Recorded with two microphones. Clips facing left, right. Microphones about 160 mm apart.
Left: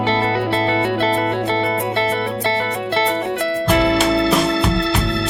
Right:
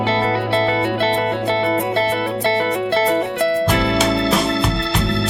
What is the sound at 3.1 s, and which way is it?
Music, 20° right (ahead or behind).